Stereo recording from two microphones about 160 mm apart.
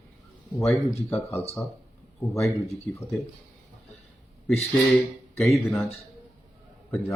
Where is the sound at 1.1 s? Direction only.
15° left (ahead or behind).